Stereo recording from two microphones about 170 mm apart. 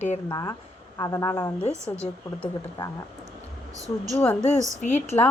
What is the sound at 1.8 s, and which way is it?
Speech, 15° right (ahead or behind).